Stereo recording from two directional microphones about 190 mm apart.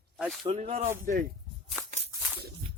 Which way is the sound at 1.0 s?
45° right (ahead or behind).